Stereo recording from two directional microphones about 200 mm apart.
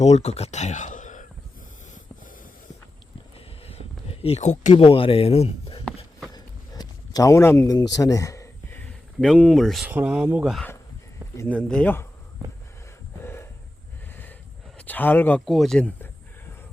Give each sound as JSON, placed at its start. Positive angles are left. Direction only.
{"t": 0.0, "sound": "speech", "side_deg": 35}
{"t": 3.7, "sound": "speech", "side_deg": 30}
{"t": 6.3, "sound": "a sound", "side_deg": 20}
{"t": 9.2, "sound": "speech", "side_deg": 5}
{"t": 13.2, "sound": "a sound", "side_deg": 10}
{"t": 14.8, "sound": "speech", "side_deg": 10}